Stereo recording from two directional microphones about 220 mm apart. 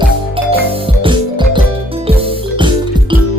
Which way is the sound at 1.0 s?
20° right (ahead or behind).